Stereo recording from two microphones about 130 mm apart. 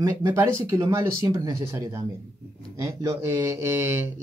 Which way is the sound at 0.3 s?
20° right (ahead or behind).